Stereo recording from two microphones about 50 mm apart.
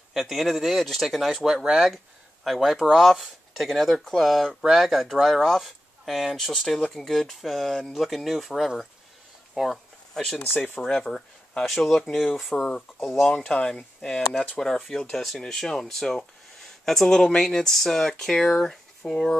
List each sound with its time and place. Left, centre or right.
0.1 s speech: centre
13.3 s speech: left; by 19.3 s centre